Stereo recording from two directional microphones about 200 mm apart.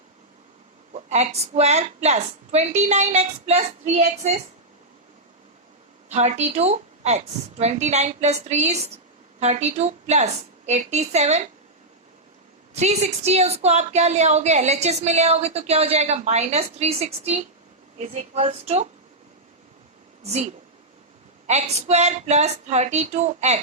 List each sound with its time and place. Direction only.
0.9 s a woman's voice: 35° right (ahead or behind)
6.1 s a woman's voice: 35° right (ahead or behind)
12.7 s a woman's voice: 35° right (ahead or behind)
20.2 s a woman's voice: 35° right (ahead or behind)